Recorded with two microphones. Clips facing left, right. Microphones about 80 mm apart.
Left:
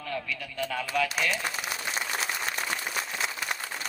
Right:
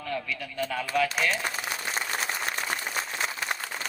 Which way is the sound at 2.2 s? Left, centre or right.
Right.